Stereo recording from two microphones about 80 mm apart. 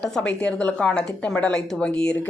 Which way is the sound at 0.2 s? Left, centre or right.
Centre.